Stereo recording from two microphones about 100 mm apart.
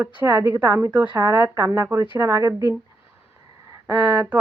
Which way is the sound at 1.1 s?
30° right (ahead or behind).